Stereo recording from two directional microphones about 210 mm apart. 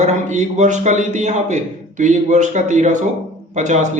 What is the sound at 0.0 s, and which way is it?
A man's voice, 35° right (ahead or behind).